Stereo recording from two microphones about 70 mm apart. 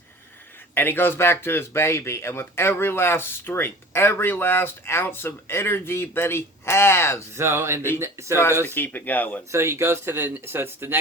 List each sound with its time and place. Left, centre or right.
0.7 s speech: left
7.3 s speech: right
8.6 s speech: left
9.5 s speech: right